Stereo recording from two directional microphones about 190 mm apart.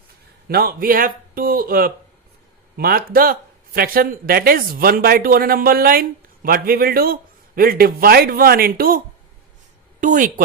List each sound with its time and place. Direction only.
0.4 s speech: 50° right (ahead or behind)
10.0 s speech: 40° right (ahead or behind)